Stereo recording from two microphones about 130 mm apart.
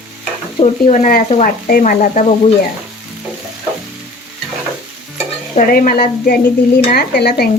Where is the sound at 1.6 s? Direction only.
90° left.